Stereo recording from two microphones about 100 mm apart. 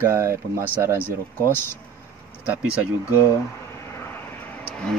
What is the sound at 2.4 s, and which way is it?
Speech, 15° right (ahead or behind).